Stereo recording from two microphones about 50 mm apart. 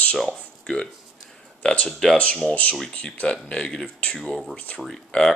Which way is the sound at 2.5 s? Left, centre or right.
Left.